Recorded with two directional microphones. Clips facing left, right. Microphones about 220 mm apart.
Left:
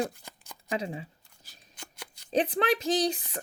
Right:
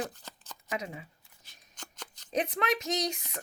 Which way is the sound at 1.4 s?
5° left (ahead or behind).